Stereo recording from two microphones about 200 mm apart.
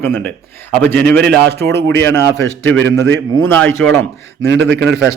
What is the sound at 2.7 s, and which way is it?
Speech, 65° right (ahead or behind).